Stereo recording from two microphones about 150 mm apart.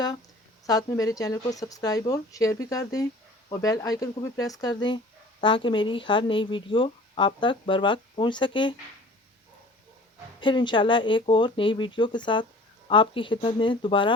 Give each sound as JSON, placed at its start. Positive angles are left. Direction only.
{"t": 0.7, "sound": "speech", "side_deg": 25}
{"t": 10.4, "sound": "speech", "side_deg": 30}